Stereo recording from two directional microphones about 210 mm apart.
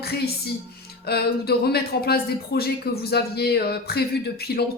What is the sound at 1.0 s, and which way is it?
Speech, 50° left (ahead or behind).